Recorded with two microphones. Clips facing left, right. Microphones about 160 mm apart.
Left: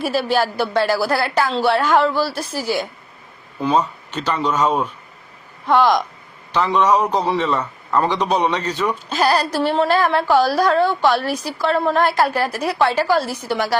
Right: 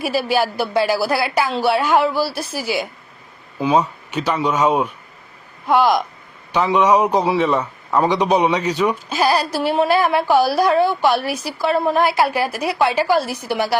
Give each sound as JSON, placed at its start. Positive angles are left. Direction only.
{"t": 0.0, "sound": "a man's voice", "side_deg": -10}